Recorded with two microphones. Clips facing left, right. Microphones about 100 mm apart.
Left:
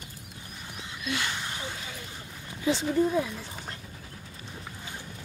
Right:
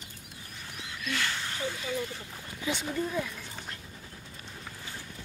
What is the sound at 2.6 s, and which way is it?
Speech, 30° left (ahead or behind).